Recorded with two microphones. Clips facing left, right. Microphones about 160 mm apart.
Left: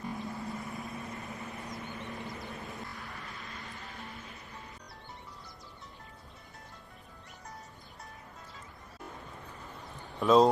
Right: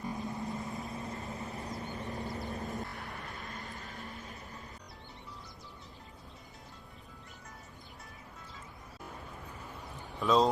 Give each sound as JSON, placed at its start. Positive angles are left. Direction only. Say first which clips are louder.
{"t": 0.0, "sound": "vehicle", "louder": "right 1 dB", "side_deg": -20}
{"t": 10.2, "sound": "speech", "louder": "left 4 dB", "side_deg": 0}